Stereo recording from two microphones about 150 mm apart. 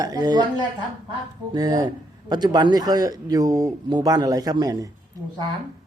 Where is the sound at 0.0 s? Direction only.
25° right (ahead or behind).